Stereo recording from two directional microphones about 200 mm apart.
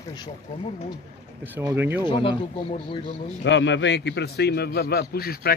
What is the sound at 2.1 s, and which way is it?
Speech, 25° left (ahead or behind).